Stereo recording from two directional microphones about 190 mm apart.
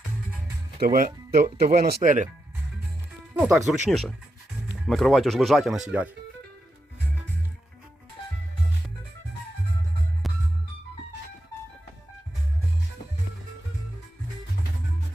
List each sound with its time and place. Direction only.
0.8 s speech: 50° right (ahead or behind)
3.3 s speech: 5° right (ahead or behind)
10.2 s music: centre (ahead or behind)